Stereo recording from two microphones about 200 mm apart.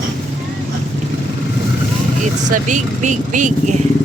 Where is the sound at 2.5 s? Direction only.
40° right (ahead or behind).